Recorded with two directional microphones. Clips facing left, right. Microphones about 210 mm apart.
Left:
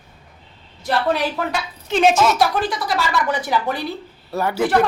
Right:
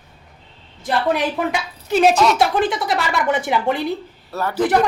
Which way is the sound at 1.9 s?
5° right (ahead or behind).